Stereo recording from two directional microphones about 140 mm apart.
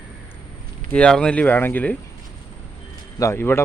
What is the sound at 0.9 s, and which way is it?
Speech, 5° left (ahead or behind).